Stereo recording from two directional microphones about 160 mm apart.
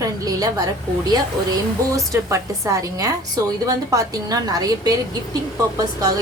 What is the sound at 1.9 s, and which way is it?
A woman's voice, 20° right (ahead or behind).